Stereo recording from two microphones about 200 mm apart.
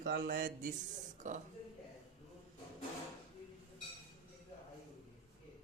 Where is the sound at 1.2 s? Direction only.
40° right (ahead or behind).